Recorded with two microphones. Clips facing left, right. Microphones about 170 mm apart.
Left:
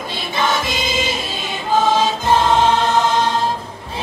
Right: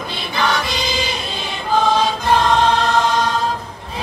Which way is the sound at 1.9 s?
25° left (ahead or behind).